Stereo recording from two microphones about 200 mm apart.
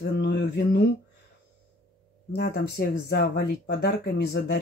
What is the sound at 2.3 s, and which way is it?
Speech, 55° left (ahead or behind).